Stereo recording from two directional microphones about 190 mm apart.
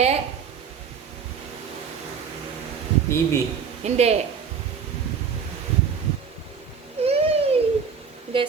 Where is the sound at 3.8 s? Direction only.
35° right (ahead or behind).